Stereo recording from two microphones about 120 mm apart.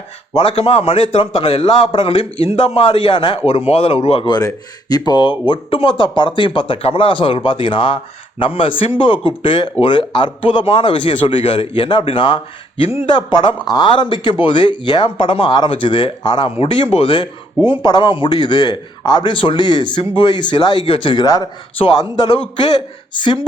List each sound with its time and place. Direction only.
0.3 s a man's voice: 50° left (ahead or behind)
4.3 s a man's voice: 30° left (ahead or behind)
22.7 s speech: 40° left (ahead or behind)